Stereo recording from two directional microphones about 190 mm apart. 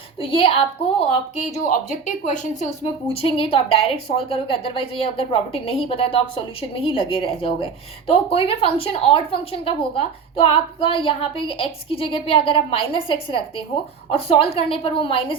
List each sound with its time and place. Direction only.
0.2 s a woman's voice: 30° left (ahead or behind)
3.1 s a woman's voice: 30° left (ahead or behind)